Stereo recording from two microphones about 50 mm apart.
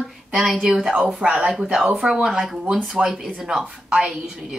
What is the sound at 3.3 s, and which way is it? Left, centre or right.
A woman's voice, centre.